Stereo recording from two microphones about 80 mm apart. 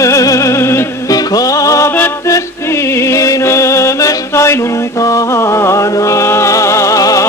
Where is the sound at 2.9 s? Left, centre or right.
Left.